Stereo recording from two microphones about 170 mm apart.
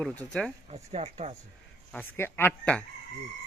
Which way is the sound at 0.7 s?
40° right (ahead or behind).